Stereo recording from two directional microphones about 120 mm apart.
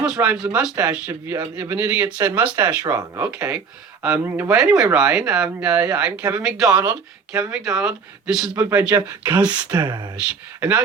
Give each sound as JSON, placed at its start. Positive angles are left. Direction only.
{"t": 0.0, "sound": "speech", "side_deg": -10}
{"t": 9.6, "sound": "speech", "side_deg": -35}
{"t": 10.2, "sound": "speech", "side_deg": -10}